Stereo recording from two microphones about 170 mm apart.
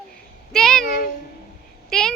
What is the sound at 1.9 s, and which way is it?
Speech, 5° left (ahead or behind).